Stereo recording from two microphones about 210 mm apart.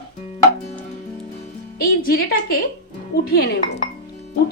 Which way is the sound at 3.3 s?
50° left (ahead or behind).